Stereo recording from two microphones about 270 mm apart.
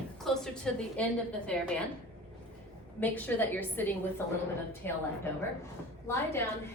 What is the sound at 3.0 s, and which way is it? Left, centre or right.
Speech, centre.